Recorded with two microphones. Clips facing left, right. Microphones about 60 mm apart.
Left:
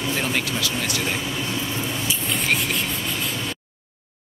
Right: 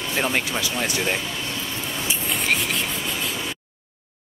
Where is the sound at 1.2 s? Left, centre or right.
Centre.